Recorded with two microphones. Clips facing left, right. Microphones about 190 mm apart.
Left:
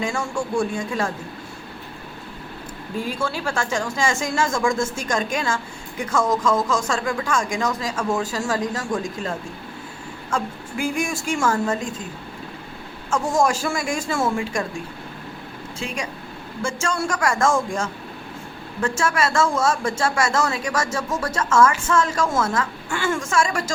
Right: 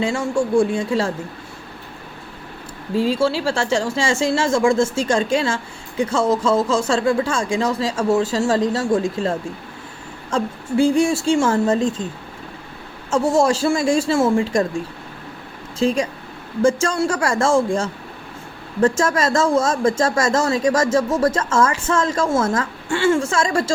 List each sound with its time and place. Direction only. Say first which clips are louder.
0.0 s speech: right 6 dB; 25° right (ahead or behind)
2.9 s speech: right 9 dB; 90° right
3.2 s speech: right 6 dB; 30° right (ahead or behind)
13.4 s speech: right 4 dB; 30° right (ahead or behind)
15.8 s speech: right 11 dB; 35° right (ahead or behind)